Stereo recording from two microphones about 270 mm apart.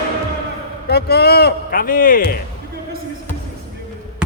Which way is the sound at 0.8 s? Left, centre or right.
Left.